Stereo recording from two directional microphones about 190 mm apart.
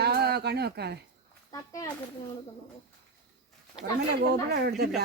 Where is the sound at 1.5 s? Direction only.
15° left (ahead or behind).